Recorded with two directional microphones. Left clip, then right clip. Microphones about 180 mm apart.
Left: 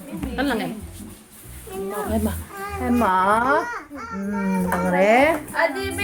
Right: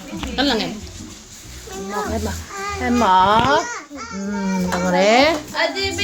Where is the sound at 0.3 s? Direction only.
25° right (ahead or behind).